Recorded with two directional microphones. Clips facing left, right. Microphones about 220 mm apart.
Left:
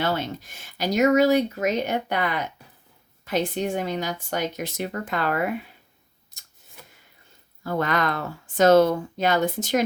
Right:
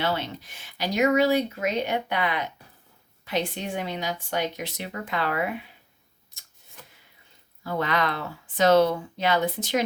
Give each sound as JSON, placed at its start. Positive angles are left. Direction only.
{"t": 0.0, "sound": "speech", "side_deg": 45}
{"t": 7.6, "sound": "speech", "side_deg": 45}